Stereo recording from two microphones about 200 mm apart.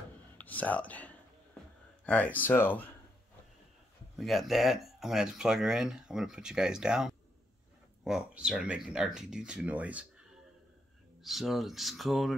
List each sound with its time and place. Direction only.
0.4 s whispering: 10° left (ahead or behind)
2.0 s speech: 10° left (ahead or behind)
4.2 s speech: centre (ahead or behind)
11.2 s speech: centre (ahead or behind)